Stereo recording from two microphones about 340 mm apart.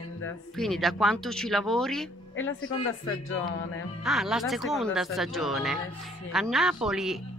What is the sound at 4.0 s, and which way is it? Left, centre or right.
Speech, centre.